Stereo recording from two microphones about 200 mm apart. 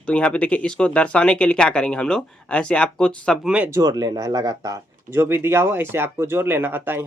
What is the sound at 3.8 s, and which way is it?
Speech, 20° right (ahead or behind).